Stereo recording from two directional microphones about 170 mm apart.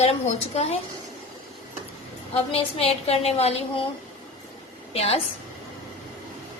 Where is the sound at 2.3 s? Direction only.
35° left (ahead or behind).